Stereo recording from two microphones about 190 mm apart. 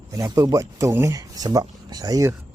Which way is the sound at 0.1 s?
20° right (ahead or behind).